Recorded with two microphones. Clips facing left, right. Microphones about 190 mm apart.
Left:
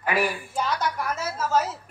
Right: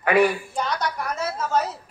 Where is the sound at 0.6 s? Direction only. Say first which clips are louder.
Even; 5° left (ahead or behind).